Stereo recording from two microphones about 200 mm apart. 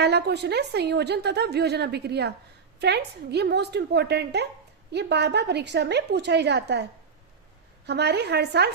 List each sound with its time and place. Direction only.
0.0 s a woman's voice: 55° right (ahead or behind)
7.9 s a woman's voice: 55° right (ahead or behind)